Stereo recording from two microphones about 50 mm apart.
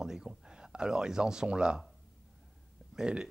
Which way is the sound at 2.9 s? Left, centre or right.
Centre.